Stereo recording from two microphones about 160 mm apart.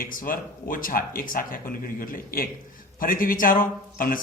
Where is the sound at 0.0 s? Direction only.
60° left (ahead or behind).